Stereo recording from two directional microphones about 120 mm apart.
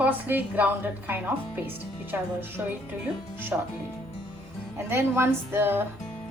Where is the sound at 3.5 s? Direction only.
20° right (ahead or behind).